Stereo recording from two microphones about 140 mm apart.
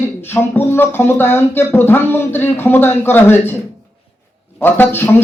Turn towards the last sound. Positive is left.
turn(degrees=15)  # may be behind; listen again after turning